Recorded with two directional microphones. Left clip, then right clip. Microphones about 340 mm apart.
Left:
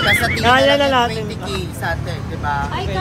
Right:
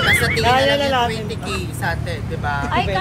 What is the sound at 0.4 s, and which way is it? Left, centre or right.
Speech, left.